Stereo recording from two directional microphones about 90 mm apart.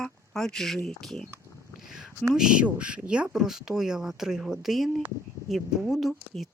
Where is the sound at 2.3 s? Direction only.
10° right (ahead or behind).